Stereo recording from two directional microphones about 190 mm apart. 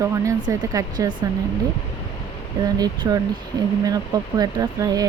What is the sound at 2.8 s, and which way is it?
Speech, 20° right (ahead or behind).